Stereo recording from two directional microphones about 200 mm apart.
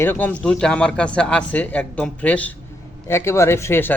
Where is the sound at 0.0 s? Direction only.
10° left (ahead or behind).